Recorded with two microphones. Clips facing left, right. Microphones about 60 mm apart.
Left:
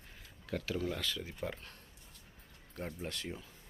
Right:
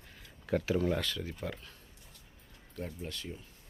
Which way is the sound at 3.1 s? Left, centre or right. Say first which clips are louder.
Even; left.